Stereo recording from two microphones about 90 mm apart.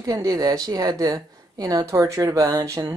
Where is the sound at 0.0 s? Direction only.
40° right (ahead or behind).